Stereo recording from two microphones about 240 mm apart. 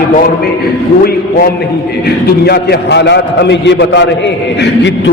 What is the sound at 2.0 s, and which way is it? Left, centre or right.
A man's voice, left.